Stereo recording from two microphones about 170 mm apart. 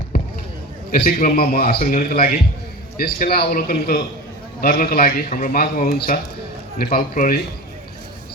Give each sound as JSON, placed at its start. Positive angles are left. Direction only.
{"t": 0.9, "sound": "a man's voice", "side_deg": 60}